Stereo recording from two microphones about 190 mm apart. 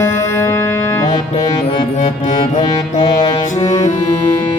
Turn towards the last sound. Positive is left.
turn(degrees=15)  # may be behind; listen again after turning